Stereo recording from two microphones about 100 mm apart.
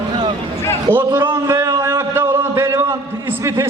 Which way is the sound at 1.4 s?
30° right (ahead or behind).